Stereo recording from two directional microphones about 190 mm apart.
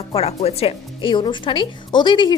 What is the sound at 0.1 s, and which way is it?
Speech, 30° left (ahead or behind).